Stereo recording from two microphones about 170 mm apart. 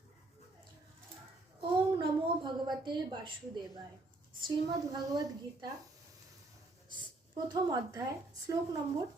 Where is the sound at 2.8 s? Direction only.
30° right (ahead or behind).